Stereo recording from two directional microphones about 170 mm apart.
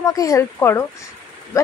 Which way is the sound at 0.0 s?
20° left (ahead or behind).